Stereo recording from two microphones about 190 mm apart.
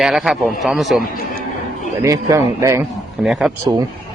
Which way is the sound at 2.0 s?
15° right (ahead or behind).